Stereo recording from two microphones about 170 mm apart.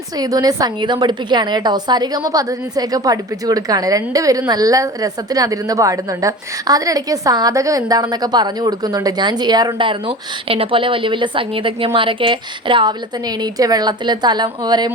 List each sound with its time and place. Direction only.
0.2 s a woman's voice: 20° right (ahead or behind)